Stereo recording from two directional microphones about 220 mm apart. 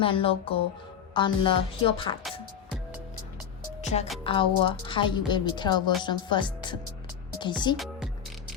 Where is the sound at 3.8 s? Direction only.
30° left (ahead or behind).